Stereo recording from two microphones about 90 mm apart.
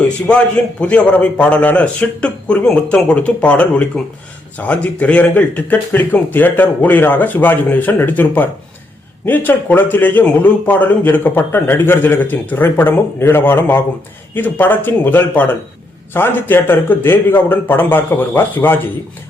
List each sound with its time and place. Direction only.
0.3 s a man's voice: 10° left (ahead or behind)